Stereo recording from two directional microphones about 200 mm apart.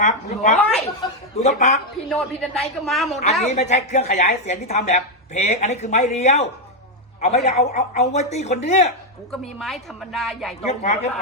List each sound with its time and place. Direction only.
0.0 s a woman's voice: 35° left (ahead or behind)
1.0 s speech: 20° left (ahead or behind)
1.4 s a woman's voice: 35° left (ahead or behind)
2.0 s a woman's voice: 5° left (ahead or behind)
3.5 s a woman's voice: 35° left (ahead or behind)
9.3 s a woman's voice: centre (ahead or behind)
10.7 s a woman's voice: 35° left (ahead or behind)